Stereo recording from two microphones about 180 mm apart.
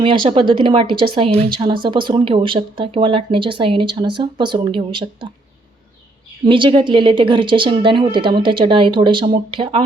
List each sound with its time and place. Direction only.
0.0 s speech: 30° right (ahead or behind)
6.4 s speech: 30° right (ahead or behind)